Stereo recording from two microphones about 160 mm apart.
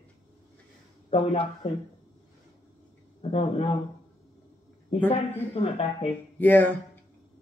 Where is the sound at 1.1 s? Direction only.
35° left (ahead or behind).